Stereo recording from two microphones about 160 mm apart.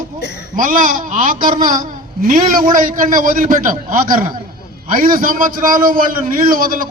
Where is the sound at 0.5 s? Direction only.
55° right (ahead or behind).